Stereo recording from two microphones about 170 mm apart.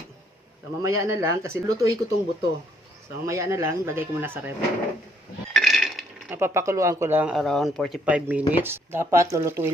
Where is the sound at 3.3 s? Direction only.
15° right (ahead or behind).